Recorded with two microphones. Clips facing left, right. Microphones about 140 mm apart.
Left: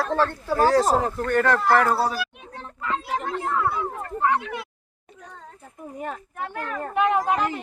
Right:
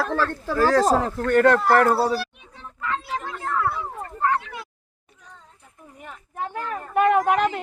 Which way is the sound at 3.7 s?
60° left (ahead or behind).